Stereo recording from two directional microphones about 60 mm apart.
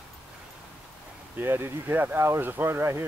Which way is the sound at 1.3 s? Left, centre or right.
Right.